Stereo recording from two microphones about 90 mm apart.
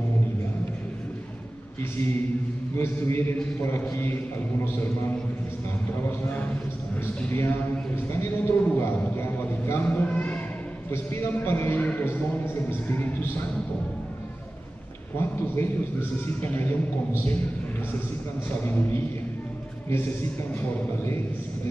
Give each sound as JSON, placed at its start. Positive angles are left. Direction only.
{"t": 1.8, "sound": "speech", "side_deg": 25}
{"t": 7.2, "sound": "speech", "side_deg": 25}
{"t": 10.9, "sound": "speech", "side_deg": 25}
{"t": 15.5, "sound": "speech", "side_deg": 25}
{"t": 18.7, "sound": "speech", "side_deg": 25}